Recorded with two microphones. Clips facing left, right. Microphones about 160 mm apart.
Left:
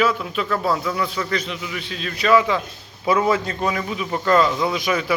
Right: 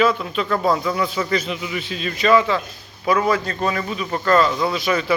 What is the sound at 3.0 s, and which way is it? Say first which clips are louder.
A man's voice: even; 20° left (ahead or behind).